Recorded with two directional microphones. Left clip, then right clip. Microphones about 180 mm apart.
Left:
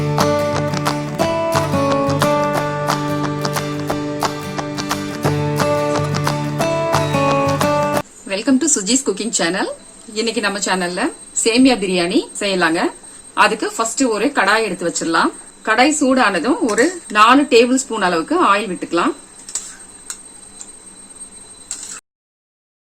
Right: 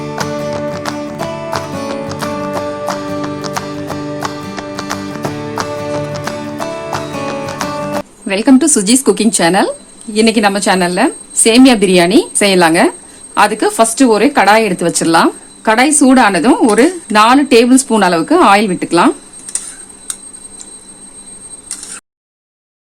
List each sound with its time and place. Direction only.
0.0 s music: centre (ahead or behind)
8.3 s speech: 55° right (ahead or behind)